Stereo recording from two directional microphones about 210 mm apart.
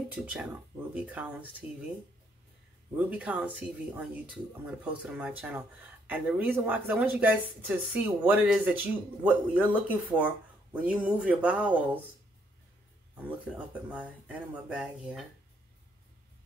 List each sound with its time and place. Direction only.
0.1 s speech: 5° right (ahead or behind)
3.0 s speech: 5° right (ahead or behind)
13.9 s speech: 5° right (ahead or behind)